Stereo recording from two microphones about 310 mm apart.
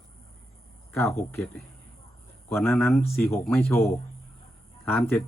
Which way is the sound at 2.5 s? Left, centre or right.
Centre.